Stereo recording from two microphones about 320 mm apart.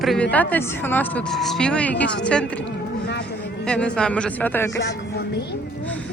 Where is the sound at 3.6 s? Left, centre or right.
Centre.